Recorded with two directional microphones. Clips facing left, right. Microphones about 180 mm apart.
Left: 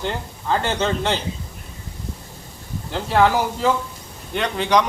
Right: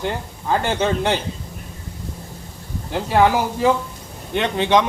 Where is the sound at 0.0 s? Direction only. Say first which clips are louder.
Right 1 dB; 10° right (ahead or behind).